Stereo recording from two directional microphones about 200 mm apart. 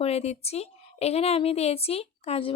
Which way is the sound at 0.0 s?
30° left (ahead or behind).